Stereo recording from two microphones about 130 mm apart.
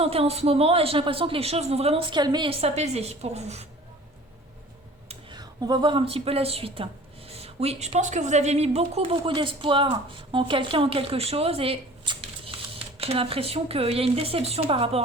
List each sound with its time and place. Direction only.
0.0 s a woman's voice: 50° right (ahead or behind)
2.5 s a woman's voice: 50° right (ahead or behind)
5.3 s a woman's voice: 30° right (ahead or behind); by 15.0 s 45° right (ahead or behind)